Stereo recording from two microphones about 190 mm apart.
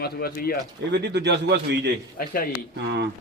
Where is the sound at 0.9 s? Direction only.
65° right (ahead or behind).